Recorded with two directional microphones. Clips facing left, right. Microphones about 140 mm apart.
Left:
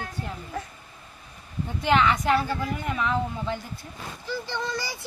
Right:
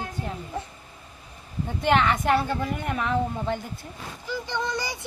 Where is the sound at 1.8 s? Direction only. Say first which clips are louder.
Even; 50° right (ahead or behind).